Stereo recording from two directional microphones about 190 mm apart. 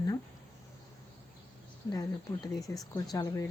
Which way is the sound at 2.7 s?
15° left (ahead or behind).